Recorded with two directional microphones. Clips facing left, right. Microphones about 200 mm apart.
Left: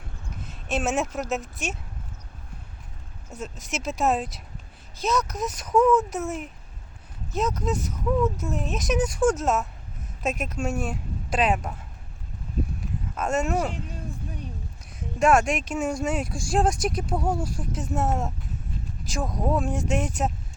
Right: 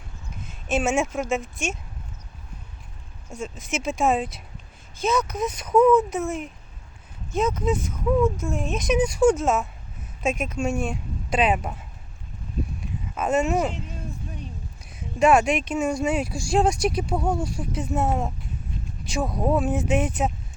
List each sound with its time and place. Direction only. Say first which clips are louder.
0.4 s a sound: right 3 dB; centre (ahead or behind)
1.1 s speech: right 3 dB; centre (ahead or behind)
3.3 s speech: right 3 dB; centre (ahead or behind)
13.1 s speech: right 3 dB; 5° right (ahead or behind)
14.9 s speech: right 2 dB; centre (ahead or behind)